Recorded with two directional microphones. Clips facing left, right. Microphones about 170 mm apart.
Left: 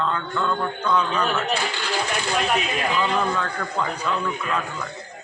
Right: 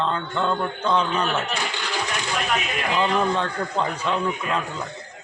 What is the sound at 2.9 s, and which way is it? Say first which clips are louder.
A man's voice: right 3 dB; 25° right (ahead or behind).